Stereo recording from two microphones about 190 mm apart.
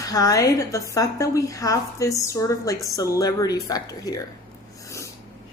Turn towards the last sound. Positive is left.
turn(degrees=20)  # may be behind; listen again after turning